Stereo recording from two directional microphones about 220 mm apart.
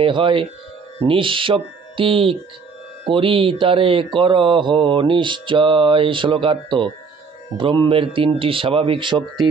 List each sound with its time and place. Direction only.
0.0 s speech: 20° right (ahead or behind)